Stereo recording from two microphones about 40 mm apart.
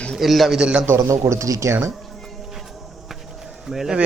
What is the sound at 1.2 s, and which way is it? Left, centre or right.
Speech, right.